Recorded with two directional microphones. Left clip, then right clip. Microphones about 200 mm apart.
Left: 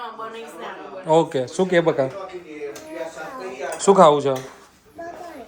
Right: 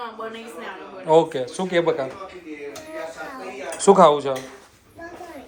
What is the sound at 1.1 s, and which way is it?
A man's voice, 25° left (ahead or behind).